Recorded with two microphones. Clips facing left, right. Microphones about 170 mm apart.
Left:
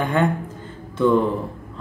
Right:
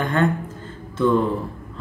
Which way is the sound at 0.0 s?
10° left (ahead or behind).